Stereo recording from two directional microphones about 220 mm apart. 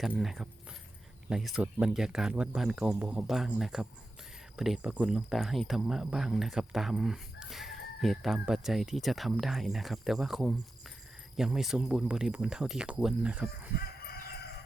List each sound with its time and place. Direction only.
0.0 s speech: centre (ahead or behind)
13.7 s chicken: 45° left (ahead or behind)